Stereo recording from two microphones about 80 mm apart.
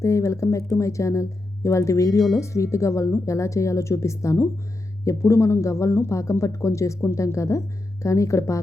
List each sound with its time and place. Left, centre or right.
0.0 s speech: left